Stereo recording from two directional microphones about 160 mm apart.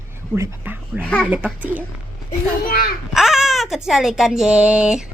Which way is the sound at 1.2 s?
10° right (ahead or behind).